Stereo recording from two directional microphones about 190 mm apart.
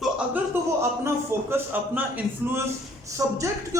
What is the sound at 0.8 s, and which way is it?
A man's voice, 15° right (ahead or behind).